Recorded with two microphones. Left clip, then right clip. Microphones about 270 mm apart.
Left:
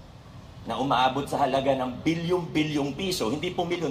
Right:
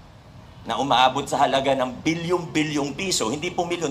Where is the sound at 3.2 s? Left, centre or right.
Right.